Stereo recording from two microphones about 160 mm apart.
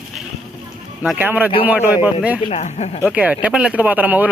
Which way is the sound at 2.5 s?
45° left (ahead or behind).